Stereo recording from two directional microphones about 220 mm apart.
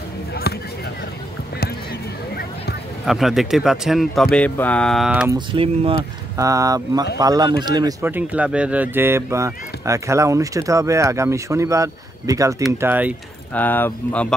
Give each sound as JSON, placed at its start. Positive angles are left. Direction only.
{"t": 0.3, "sound": "a sound", "side_deg": 45}
{"t": 3.1, "sound": "speech", "side_deg": 0}
{"t": 5.3, "sound": "speech", "side_deg": -25}
{"t": 13.5, "sound": "speech", "side_deg": 10}